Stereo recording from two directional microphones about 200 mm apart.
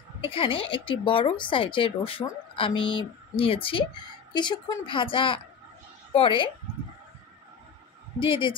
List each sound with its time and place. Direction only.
0.2 s a woman's voice: 25° left (ahead or behind)
8.2 s a woman's voice: 25° left (ahead or behind)